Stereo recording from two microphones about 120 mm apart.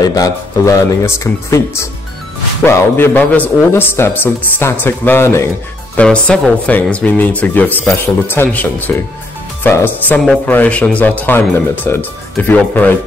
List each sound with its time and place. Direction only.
0.1 s speech: 30° left (ahead or behind)
5.9 s speech: 10° left (ahead or behind)